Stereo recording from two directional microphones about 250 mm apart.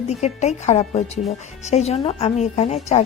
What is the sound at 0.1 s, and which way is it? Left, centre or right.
Speech, left.